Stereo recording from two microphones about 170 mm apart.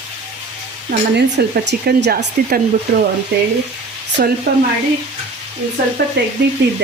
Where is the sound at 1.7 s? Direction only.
80° right; by 4.3 s 60° right (ahead or behind).